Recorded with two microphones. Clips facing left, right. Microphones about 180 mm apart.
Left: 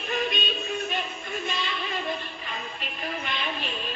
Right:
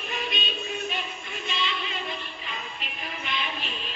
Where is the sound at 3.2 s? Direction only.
50° left (ahead or behind).